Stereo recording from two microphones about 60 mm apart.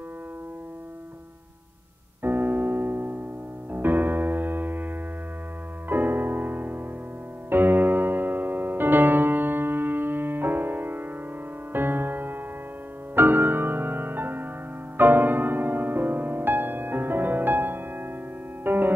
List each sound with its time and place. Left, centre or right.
2.2 s keyboard: right
3.7 s piano: right
5.9 s music: right